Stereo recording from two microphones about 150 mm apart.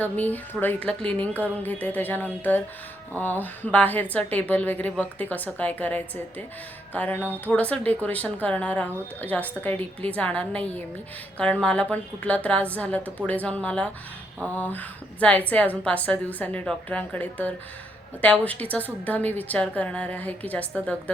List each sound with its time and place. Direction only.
0.0 s speech: 10° left (ahead or behind)